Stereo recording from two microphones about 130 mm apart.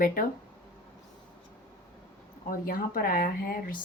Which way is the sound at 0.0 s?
90° left.